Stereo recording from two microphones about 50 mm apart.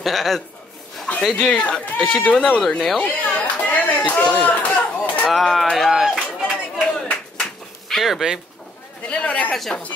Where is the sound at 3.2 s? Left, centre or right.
Left.